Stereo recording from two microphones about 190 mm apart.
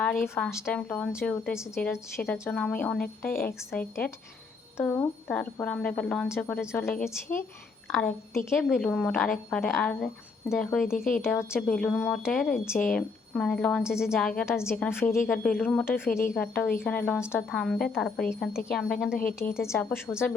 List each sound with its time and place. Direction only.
0.3 s a woman's voice: 10° left (ahead or behind)
10.9 s a woman's voice: 45° left (ahead or behind)
11.2 s speech: centre (ahead or behind)
14.6 s speech: 5° right (ahead or behind)
14.8 s speech: 10° left (ahead or behind)
17.5 s speech: centre (ahead or behind)
19.4 s speech: 15° left (ahead or behind)